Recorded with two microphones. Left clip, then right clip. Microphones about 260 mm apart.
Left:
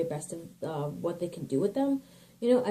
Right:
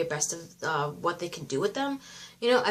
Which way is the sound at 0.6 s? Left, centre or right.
Right.